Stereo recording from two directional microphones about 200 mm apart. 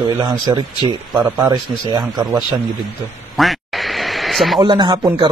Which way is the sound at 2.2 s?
Centre (ahead or behind).